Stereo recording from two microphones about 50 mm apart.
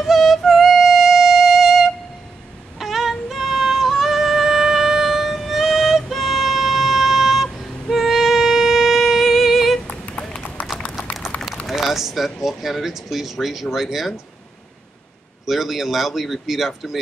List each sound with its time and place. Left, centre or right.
0.0 s music: centre
10.6 s run: left
11.6 s a sound: centre
15.4 s speech: centre